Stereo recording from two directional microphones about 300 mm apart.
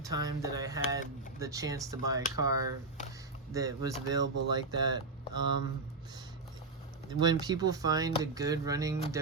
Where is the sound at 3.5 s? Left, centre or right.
Centre.